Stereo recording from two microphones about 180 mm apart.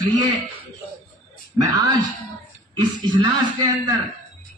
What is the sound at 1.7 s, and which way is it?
A man's voice, 20° right (ahead or behind).